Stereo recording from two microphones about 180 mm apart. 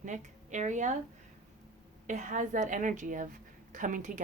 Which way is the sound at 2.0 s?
45° right (ahead or behind).